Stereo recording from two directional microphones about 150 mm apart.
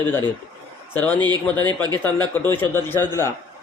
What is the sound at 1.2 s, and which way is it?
Speech, 30° right (ahead or behind).